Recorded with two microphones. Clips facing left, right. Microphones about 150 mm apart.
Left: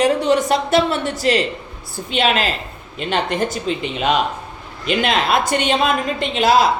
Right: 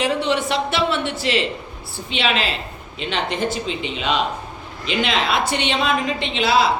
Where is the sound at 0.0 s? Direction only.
45° left (ahead or behind).